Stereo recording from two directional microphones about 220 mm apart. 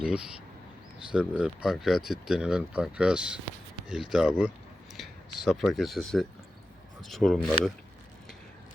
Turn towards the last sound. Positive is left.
turn(degrees=0)  # may be behind; listen again after turning